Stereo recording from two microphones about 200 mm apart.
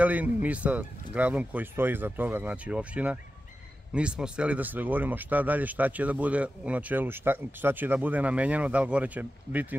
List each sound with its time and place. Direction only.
0.0 s speech: 10° right (ahead or behind)